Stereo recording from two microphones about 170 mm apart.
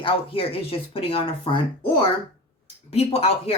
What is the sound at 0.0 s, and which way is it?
Speech, 35° left (ahead or behind).